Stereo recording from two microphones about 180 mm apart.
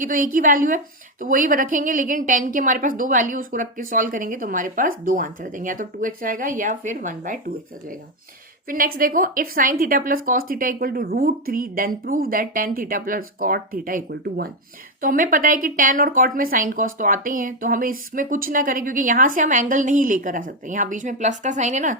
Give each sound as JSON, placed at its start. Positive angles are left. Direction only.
{"t": 0.0, "sound": "a woman's voice", "side_deg": -50}